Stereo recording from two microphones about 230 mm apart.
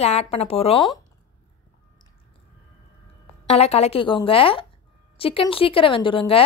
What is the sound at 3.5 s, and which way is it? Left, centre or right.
Speech, left.